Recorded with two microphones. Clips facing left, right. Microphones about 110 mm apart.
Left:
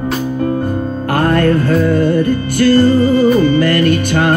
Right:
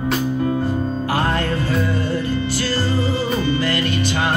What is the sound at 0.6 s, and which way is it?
Music, 55° left (ahead or behind).